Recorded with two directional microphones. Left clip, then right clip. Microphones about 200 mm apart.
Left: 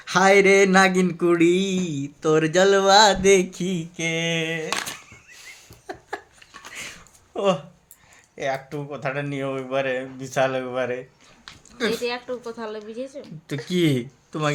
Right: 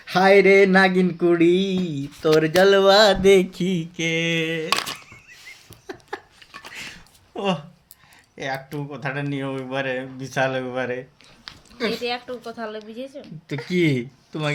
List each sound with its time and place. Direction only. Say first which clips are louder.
0.0 s speech: right 1 dB; 10° left (ahead or behind)
5.9 s a sound: left 1 dB; centre (ahead or behind)
8.4 s speech: left 2 dB; 5° left (ahead or behind)
12.0 s speech: even; 5° left (ahead or behind)